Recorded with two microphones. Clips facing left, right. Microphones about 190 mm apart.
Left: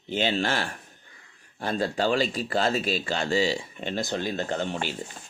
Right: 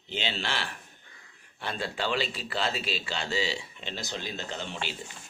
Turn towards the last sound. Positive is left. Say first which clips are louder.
# left 8 dB
turn(degrees=50)  # may be behind; listen again after turning